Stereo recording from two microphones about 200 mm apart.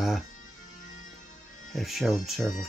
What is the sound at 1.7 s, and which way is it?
Speech, centre (ahead or behind).